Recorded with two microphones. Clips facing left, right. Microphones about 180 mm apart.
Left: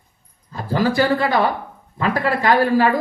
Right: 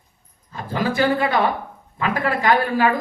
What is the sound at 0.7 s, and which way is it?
Speech, 35° left (ahead or behind).